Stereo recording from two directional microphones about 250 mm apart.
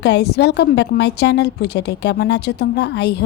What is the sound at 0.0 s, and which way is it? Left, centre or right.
A woman's voice, left.